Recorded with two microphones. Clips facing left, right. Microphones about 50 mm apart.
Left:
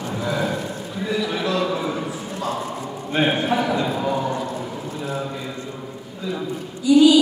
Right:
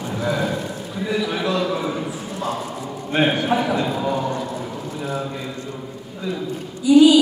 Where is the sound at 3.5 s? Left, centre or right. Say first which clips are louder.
Right 1 dB; right.